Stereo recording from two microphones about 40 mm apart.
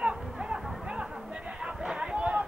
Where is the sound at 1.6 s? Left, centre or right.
Centre.